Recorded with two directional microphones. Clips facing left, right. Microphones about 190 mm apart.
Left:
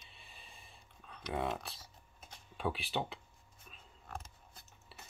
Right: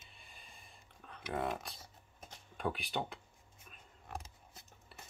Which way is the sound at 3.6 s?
10° right (ahead or behind).